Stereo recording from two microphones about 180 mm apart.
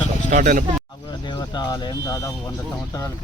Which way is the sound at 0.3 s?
45° right (ahead or behind).